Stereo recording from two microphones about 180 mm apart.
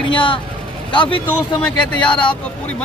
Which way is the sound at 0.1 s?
30° left (ahead or behind).